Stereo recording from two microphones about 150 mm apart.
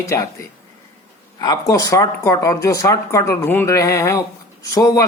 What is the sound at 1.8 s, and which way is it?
Speech, 25° left (ahead or behind).